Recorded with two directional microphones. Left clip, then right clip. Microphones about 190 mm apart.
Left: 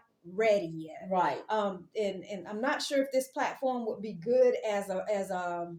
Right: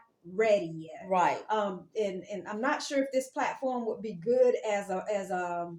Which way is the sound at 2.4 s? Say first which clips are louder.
Even; 15° left (ahead or behind).